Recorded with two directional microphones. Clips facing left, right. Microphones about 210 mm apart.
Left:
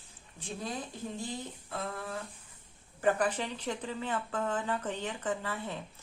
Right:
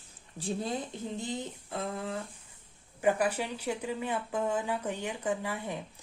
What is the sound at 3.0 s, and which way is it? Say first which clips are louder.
Speech: right 1 dB; 10° right (ahead or behind).